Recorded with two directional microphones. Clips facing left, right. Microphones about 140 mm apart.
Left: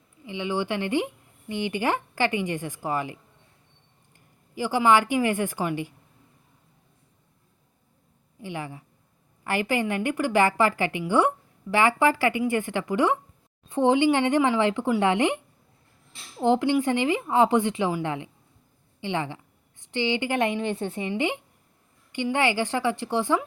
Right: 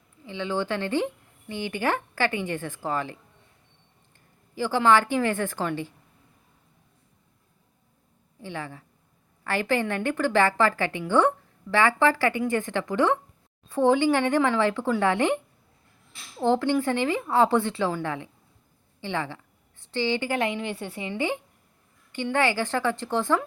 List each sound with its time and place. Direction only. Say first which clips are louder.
0.3 s a woman's voice: even; 15° left (ahead or behind)
4.5 s a woman's voice: even; 15° left (ahead or behind)
8.4 s a woman's voice: left 1 dB; 15° left (ahead or behind)
16.4 s a woman's voice: left 1 dB; 15° left (ahead or behind)